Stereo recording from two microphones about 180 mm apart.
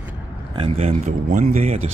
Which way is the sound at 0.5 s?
30° right (ahead or behind).